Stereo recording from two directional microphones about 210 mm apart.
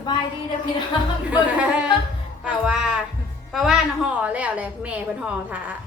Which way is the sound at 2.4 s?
5° right (ahead or behind).